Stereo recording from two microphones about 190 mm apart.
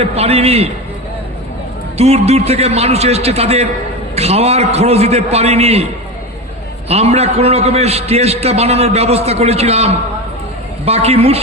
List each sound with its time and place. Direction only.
0.0 s a man's voice: 30° right (ahead or behind)
2.0 s a man's voice: 35° right (ahead or behind)
6.8 s a man's voice: 35° right (ahead or behind)